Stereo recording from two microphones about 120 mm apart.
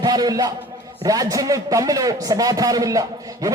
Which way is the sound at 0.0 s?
35° right (ahead or behind).